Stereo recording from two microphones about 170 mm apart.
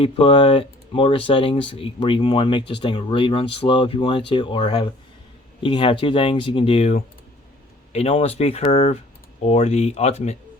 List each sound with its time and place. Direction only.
0.0 s speech: 30° left (ahead or behind)
7.9 s speech: 40° left (ahead or behind)